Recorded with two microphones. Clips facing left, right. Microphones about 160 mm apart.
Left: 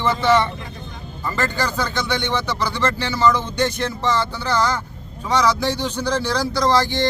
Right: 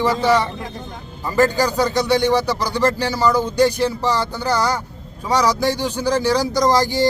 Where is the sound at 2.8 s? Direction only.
40° right (ahead or behind).